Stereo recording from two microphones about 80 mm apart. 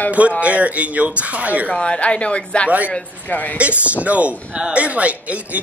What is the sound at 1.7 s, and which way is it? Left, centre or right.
A woman's voice, centre.